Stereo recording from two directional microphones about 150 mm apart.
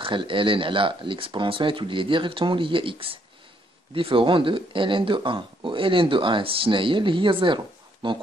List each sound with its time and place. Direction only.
0.0 s speech: 35° right (ahead or behind)